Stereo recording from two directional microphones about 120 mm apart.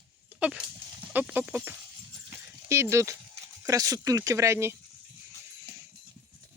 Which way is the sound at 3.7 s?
30° right (ahead or behind).